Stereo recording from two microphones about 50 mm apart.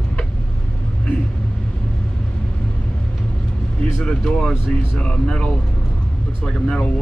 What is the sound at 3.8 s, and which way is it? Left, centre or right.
Speech, centre.